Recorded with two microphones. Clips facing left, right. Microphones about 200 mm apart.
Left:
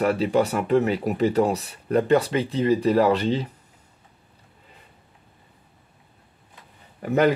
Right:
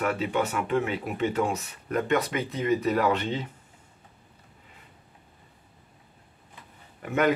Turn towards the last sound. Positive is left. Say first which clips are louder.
# left 5 dB
turn(degrees=35)  # may be behind; listen again after turning